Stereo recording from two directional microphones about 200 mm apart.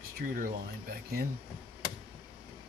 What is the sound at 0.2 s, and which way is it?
Speech, 45° right (ahead or behind).